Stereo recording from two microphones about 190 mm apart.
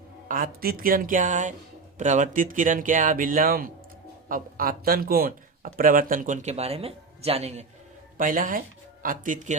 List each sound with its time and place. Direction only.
0.3 s speech: 45° right (ahead or behind)
8.2 s speech: 45° right (ahead or behind)